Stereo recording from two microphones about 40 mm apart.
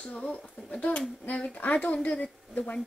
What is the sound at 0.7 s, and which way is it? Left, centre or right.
Speech, left.